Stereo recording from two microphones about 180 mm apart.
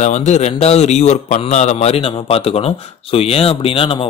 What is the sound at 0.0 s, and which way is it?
A man's voice, 40° left (ahead or behind).